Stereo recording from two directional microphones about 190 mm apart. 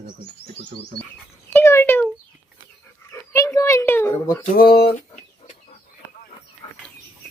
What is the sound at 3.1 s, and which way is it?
Speech, 15° left (ahead or behind).